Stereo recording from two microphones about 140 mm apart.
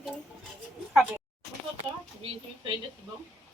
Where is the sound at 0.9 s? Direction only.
10° right (ahead or behind).